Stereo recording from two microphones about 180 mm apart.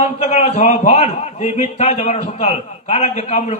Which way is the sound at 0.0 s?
35° left (ahead or behind).